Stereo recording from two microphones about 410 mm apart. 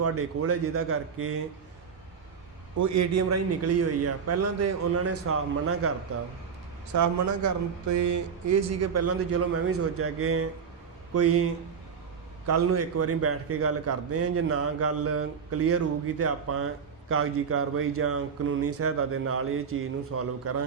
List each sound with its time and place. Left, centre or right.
0.0 s a man's voice: right
2.7 s a man's voice: right
6.9 s a man's voice: right